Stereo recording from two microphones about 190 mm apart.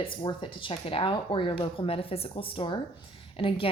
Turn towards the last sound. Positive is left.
turn(degrees=30)  # may be behind; listen again after turning